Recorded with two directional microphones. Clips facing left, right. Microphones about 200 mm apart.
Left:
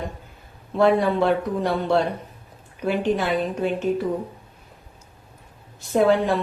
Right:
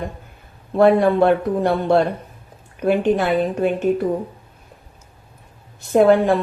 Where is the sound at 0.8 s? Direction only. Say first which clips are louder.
Right 5 dB; 55° right (ahead or behind).